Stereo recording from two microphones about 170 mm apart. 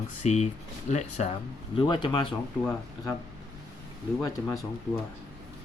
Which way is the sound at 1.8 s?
30° left (ahead or behind).